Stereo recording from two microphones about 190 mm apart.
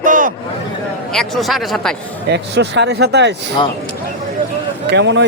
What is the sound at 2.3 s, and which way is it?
Speech, 65° right (ahead or behind).